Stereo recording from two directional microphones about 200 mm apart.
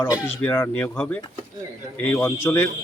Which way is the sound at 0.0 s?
10° left (ahead or behind).